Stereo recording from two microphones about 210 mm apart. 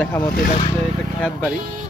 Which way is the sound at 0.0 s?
10° left (ahead or behind).